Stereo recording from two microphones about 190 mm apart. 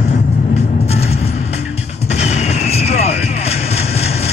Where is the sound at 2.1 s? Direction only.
35° left (ahead or behind).